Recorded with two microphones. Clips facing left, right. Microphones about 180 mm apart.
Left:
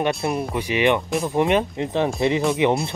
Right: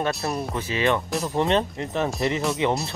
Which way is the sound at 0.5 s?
15° left (ahead or behind).